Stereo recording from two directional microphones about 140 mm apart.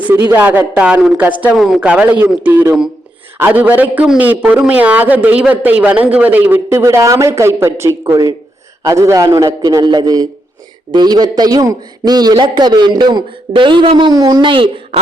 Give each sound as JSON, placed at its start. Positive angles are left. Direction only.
{"t": 0.1, "sound": "a man's voice", "side_deg": -15}